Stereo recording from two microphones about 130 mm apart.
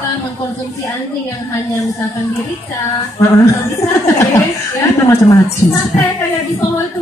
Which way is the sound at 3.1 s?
25° left (ahead or behind).